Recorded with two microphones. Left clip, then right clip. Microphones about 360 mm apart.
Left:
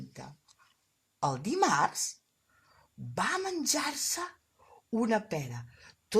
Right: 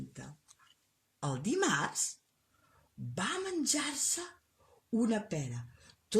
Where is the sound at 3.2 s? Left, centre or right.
Left.